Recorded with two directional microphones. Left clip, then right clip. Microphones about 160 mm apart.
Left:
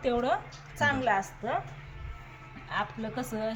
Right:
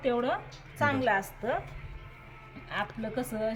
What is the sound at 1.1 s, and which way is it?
Speech, 20° right (ahead or behind).